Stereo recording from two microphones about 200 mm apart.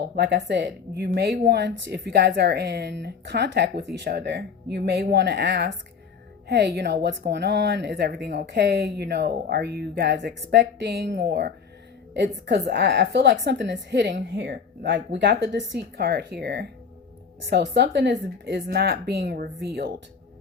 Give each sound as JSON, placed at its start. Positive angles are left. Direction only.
{"t": 0.2, "sound": "speech", "side_deg": -55}